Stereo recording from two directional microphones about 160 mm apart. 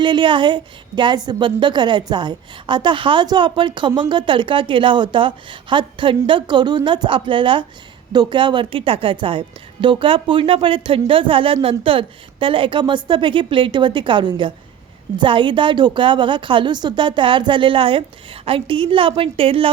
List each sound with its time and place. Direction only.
0.0 s a woman's voice: 30° right (ahead or behind)